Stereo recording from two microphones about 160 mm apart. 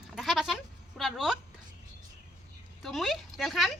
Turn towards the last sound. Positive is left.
turn(degrees=0)  # may be behind; listen again after turning